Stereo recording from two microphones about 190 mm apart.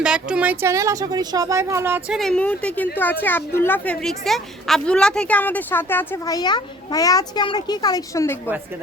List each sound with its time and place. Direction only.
0.0 s speech: 5° right (ahead or behind)
2.1 s a woman's voice: 5° left (ahead or behind)